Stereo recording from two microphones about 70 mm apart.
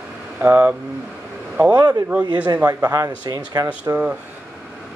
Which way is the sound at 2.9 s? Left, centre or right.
Right.